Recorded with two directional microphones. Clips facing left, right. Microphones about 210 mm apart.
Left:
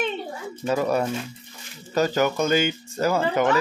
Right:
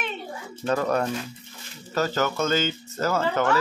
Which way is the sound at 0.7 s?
10° left (ahead or behind).